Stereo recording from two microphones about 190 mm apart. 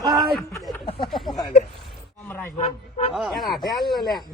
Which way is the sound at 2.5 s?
30° left (ahead or behind).